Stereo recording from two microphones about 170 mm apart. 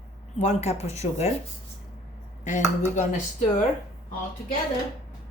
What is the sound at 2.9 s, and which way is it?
Speech, 45° left (ahead or behind).